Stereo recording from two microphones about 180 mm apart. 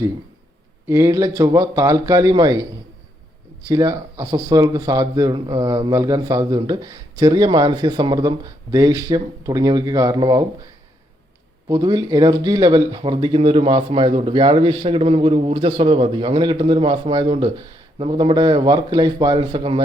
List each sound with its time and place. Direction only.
0.9 s speech: 15° right (ahead or behind)
11.7 s speech: 20° right (ahead or behind)